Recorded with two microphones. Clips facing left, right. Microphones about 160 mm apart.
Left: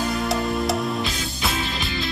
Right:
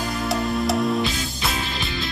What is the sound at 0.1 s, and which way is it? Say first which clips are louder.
Music: even; centre (ahead or behind).